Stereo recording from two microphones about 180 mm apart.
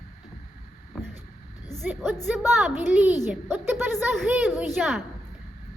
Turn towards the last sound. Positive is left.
turn(degrees=-5)  # may be behind; listen again after turning